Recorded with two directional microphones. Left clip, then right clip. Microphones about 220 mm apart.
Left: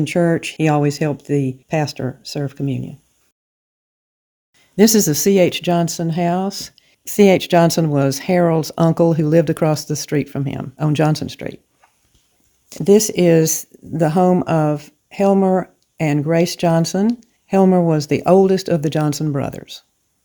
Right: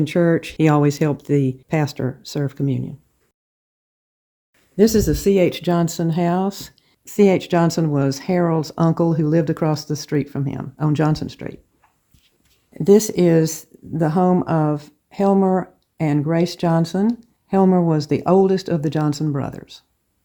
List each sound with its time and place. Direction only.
0.0 s speech: 15° left (ahead or behind)
0.6 s speech: centre (ahead or behind)
4.8 s speech: 40° left (ahead or behind); by 7.0 s 10° left (ahead or behind)
7.0 s speech: 25° left (ahead or behind)
12.7 s speech: 10° left (ahead or behind)